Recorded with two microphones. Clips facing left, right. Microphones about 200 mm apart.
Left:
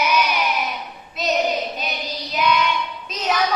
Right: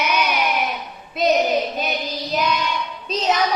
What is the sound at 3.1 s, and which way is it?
Music, 25° right (ahead or behind).